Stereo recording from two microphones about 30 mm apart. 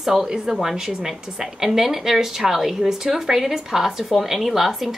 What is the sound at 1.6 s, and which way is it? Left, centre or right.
Speech, centre.